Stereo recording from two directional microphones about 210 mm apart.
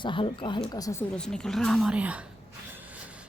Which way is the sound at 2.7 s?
10° right (ahead or behind).